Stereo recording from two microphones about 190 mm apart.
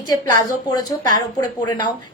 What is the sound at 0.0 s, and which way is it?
A woman's voice, 20° left (ahead or behind).